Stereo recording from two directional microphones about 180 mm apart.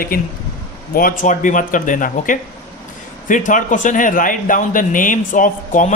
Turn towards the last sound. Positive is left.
turn(degrees=45)  # may be behind; listen again after turning